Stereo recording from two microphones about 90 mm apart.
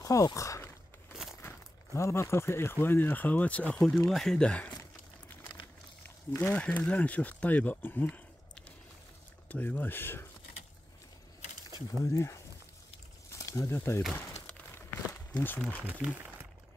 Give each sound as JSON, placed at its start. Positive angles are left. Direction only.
{"t": 0.0, "sound": "speech", "side_deg": 40}
{"t": 2.0, "sound": "speech", "side_deg": 35}
{"t": 6.0, "sound": "speech", "side_deg": 20}
{"t": 8.1, "sound": "a sound", "side_deg": 10}
{"t": 9.5, "sound": "speech", "side_deg": 20}
{"t": 12.0, "sound": "speech", "side_deg": 35}
{"t": 13.3, "sound": "a sound", "side_deg": 40}
{"t": 13.7, "sound": "speech", "side_deg": 25}
{"t": 15.3, "sound": "speech", "side_deg": 20}
{"t": 15.8, "sound": "speech", "side_deg": -15}